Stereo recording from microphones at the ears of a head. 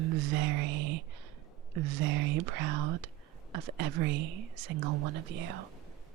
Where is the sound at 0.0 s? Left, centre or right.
Right.